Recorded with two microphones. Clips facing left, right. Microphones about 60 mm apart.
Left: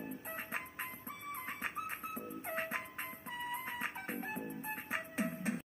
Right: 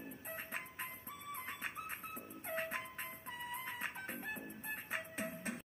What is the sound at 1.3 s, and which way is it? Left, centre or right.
Music, left.